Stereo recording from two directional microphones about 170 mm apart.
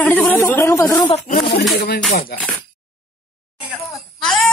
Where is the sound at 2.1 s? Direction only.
50° left (ahead or behind).